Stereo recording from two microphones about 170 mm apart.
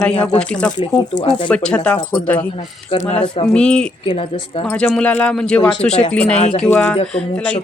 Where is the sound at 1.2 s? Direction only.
30° left (ahead or behind).